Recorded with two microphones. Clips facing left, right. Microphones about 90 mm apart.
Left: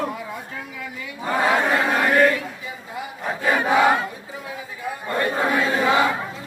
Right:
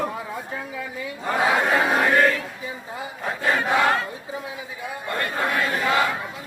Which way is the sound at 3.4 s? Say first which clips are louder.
Left 3 dB; 10° left (ahead or behind).